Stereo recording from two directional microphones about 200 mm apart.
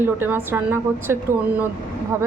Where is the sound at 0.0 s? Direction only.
10° right (ahead or behind).